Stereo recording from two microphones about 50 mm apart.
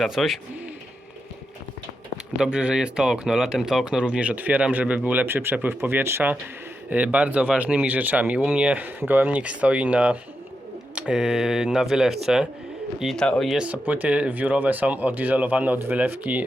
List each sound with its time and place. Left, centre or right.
0.2 s speech: centre
2.4 s speech: right
3.9 s speech: right
5.2 s speech: right
6.9 s speech: right
9.4 s speech: right
11.1 s speech: centre
13.8 s speech: right